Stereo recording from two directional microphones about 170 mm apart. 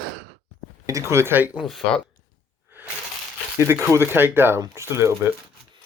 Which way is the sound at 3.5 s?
15° right (ahead or behind).